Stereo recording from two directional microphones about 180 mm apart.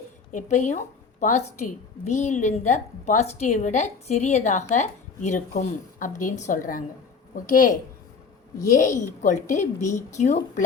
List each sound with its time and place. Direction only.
0.3 s a woman's voice: 40° left (ahead or behind)
9.2 s a woman's voice: 40° left (ahead or behind)